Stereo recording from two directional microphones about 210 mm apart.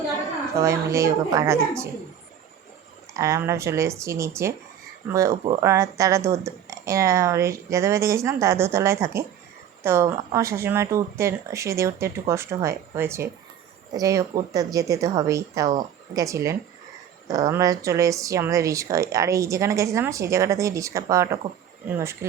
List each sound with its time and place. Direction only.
0.6 s speech: 15° right (ahead or behind)
3.2 s speech: 15° right (ahead or behind)